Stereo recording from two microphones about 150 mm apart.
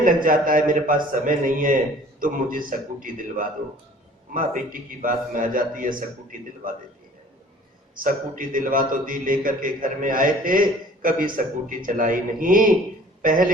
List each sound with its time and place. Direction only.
0.0 s a man's voice: 65° right (ahead or behind)
8.0 s a man's voice: 65° right (ahead or behind)